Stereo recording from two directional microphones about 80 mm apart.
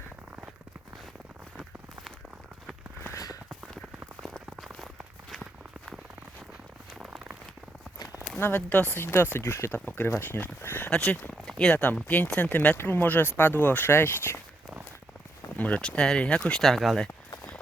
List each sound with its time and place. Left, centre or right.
3.1 s a sound: left
8.4 s speech: left
8.7 s speech: left
10.9 s speech: centre; by 14.4 s left
15.5 s speech: centre